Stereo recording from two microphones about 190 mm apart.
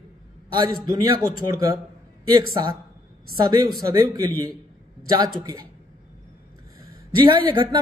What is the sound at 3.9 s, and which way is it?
Speech, 15° right (ahead or behind).